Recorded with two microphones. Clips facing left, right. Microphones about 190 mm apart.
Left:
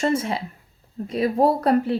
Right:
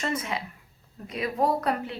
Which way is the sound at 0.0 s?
30° left (ahead or behind).